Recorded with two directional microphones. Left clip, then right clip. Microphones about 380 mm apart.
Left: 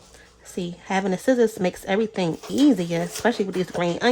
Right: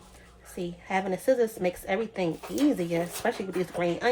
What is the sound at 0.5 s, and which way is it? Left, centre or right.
Speech, left.